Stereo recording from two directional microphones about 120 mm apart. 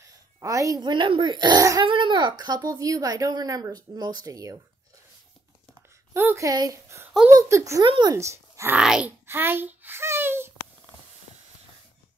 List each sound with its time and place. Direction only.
0.0 s a woman's voice: 25° right (ahead or behind)
5.8 s a sound: 15° right (ahead or behind)
7.3 s a child's voice: 25° right (ahead or behind)
7.8 s a woman's voice: 40° right (ahead or behind)
8.1 s speech: 25° right (ahead or behind)
8.7 s speech: 10° right (ahead or behind)
9.2 s a sound: 20° right (ahead or behind)